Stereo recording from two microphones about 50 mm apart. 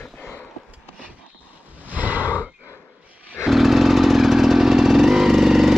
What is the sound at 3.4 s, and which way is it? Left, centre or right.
Vehicle, centre.